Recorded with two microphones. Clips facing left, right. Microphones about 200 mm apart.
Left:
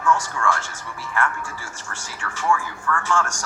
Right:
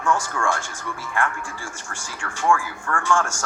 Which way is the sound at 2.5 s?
50° right (ahead or behind).